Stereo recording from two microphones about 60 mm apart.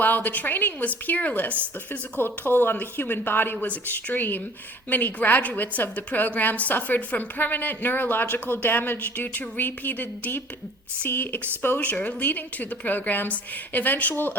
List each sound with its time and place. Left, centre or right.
0.0 s a woman's voice: left